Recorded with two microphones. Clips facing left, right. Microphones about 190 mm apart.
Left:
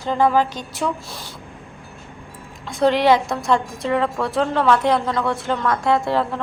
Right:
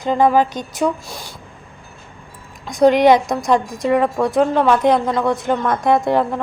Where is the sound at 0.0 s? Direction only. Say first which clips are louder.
Right 3 dB; 15° right (ahead or behind).